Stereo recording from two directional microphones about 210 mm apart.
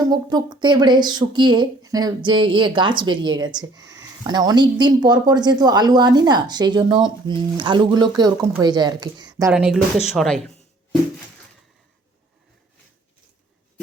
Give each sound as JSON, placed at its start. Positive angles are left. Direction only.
{"t": 0.0, "sound": "speech", "side_deg": -20}
{"t": 9.5, "sound": "speech", "side_deg": -5}